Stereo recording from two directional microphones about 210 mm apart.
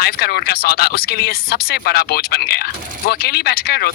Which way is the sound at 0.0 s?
50° left (ahead or behind).